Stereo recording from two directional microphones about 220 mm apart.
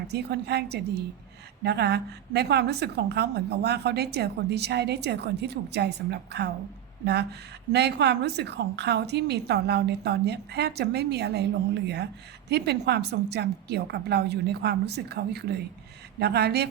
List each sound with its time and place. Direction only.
0.1 s a woman's voice: 50° right (ahead or behind)
12.5 s a woman's voice: 50° right (ahead or behind)